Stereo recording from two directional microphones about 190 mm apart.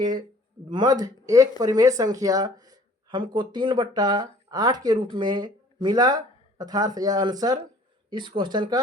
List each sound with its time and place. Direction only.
0.7 s speech: 20° right (ahead or behind)